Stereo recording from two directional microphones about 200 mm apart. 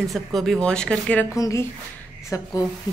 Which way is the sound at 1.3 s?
15° left (ahead or behind).